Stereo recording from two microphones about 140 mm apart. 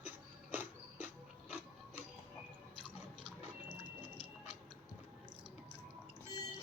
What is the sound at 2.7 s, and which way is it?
Chewing, 35° right (ahead or behind).